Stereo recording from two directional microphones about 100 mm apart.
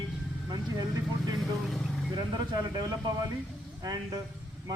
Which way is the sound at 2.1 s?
45° right (ahead or behind).